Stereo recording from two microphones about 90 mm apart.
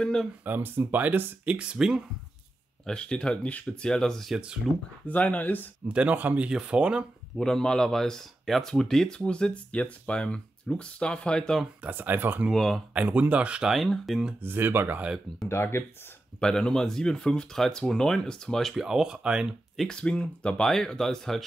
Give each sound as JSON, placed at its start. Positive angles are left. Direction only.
{"t": 0.0, "sound": "speech", "side_deg": 5}
{"t": 0.5, "sound": "speech", "side_deg": -20}
{"t": 2.9, "sound": "speech", "side_deg": 10}
{"t": 4.3, "sound": "speech", "side_deg": -10}
{"t": 5.0, "sound": "speech", "side_deg": 15}
{"t": 5.9, "sound": "speech", "side_deg": -15}
{"t": 7.3, "sound": "speech", "side_deg": 5}
{"t": 11.8, "sound": "speech", "side_deg": -25}
{"t": 12.5, "sound": "speech", "side_deg": 5}
{"t": 12.9, "sound": "speech", "side_deg": -15}
{"t": 14.4, "sound": "speech", "side_deg": -25}
{"t": 15.4, "sound": "speech", "side_deg": 25}
{"t": 16.3, "sound": "speech", "side_deg": 10}
{"t": 19.9, "sound": "speech", "side_deg": 10}